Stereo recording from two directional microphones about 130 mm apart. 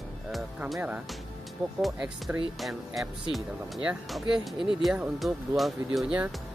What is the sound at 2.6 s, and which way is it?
Speech, centre (ahead or behind).